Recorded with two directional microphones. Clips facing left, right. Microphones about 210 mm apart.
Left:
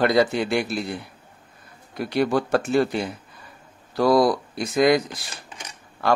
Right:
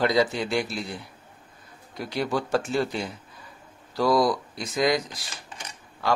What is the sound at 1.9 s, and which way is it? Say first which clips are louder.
Speech: left 6 dB; 60° left (ahead or behind).